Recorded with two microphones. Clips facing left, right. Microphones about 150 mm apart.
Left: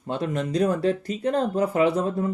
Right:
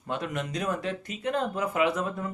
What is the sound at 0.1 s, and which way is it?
Speech, 30° left (ahead or behind).